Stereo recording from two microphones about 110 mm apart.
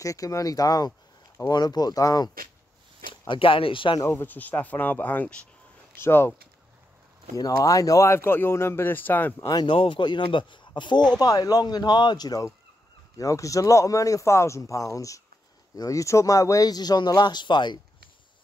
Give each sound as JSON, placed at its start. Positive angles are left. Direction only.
{"t": 0.0, "sound": "speech", "side_deg": 30}
{"t": 3.1, "sound": "speech", "side_deg": 50}
{"t": 4.1, "sound": "speech", "side_deg": 15}
{"t": 7.3, "sound": "speech", "side_deg": 30}
{"t": 9.5, "sound": "speech", "side_deg": 40}